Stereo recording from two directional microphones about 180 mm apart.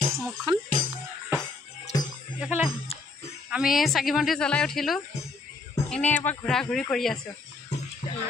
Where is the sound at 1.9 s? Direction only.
20° left (ahead or behind).